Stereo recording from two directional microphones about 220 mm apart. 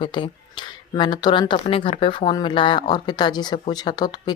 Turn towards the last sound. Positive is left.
turn(degrees=20)  # may be behind; listen again after turning